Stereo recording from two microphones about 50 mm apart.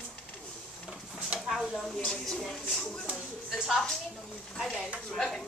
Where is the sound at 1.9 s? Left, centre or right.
Centre.